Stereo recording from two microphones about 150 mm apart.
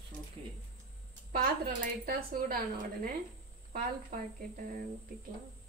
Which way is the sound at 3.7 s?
80° right.